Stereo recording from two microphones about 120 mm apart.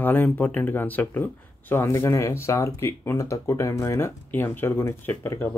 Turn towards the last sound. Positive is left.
turn(degrees=20)  # may be behind; listen again after turning